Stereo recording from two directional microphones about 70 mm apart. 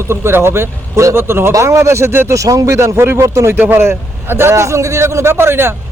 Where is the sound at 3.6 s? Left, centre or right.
Right.